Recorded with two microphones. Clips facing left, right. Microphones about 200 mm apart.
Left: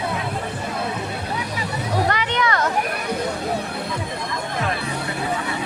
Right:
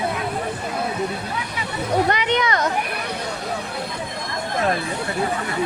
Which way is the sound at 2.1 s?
20° right (ahead or behind).